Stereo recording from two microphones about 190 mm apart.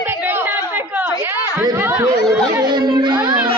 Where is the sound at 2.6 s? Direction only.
25° right (ahead or behind).